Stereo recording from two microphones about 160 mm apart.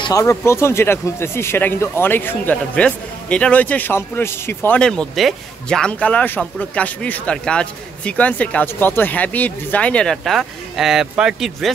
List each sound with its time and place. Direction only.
0.0 s speech: 20° left (ahead or behind); by 11.7 s 5° right (ahead or behind)